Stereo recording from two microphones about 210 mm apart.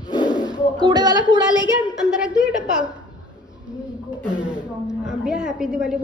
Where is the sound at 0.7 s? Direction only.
20° right (ahead or behind).